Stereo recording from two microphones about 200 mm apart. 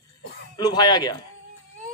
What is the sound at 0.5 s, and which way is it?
Speech, 20° left (ahead or behind).